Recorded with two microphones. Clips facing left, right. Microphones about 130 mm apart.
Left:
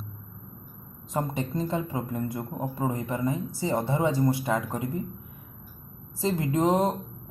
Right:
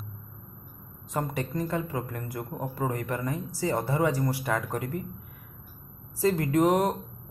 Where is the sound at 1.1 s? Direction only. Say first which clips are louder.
Left 1 dB; 25° left (ahead or behind).